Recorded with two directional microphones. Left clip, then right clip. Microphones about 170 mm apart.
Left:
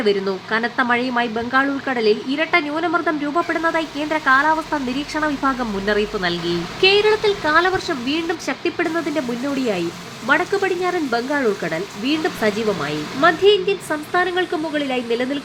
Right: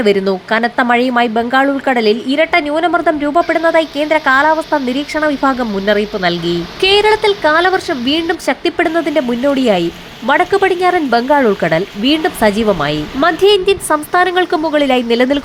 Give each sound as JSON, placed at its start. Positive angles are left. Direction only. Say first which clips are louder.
{"t": 0.0, "sound": "speech", "louder": "right 7 dB", "side_deg": -35}
{"t": 10.2, "sound": "speech", "louder": "right 7 dB", "side_deg": -40}